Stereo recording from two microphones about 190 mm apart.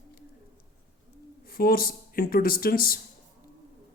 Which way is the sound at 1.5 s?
50° left (ahead or behind).